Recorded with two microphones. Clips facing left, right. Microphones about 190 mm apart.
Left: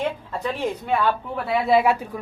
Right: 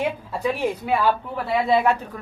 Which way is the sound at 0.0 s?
10° right (ahead or behind).